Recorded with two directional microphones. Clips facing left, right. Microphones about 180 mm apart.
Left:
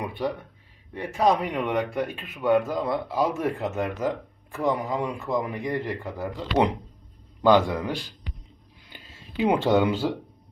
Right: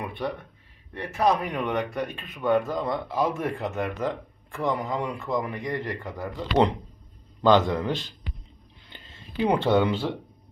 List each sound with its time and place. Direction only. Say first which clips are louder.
0.0 s speech: left 2 dB; 10° left (ahead or behind)
8.9 s a sound: even; 10° left (ahead or behind)
9.5 s speech: left 1 dB; 10° left (ahead or behind)